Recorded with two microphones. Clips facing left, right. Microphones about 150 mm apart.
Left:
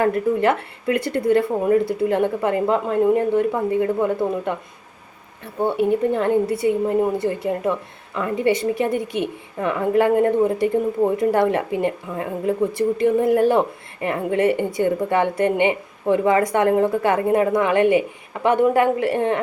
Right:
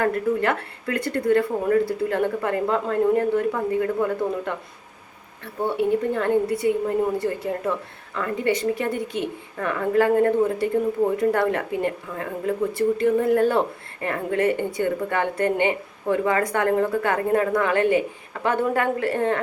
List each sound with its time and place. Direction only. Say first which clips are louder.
0.0 s a woman's voice: left 4 dB; 20° left (ahead or behind)
5.6 s a woman's voice: left 3 dB; 20° left (ahead or behind)